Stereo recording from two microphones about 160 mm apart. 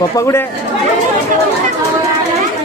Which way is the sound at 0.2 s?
20° left (ahead or behind).